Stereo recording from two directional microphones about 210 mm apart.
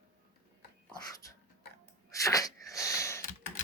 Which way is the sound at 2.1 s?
15° left (ahead or behind).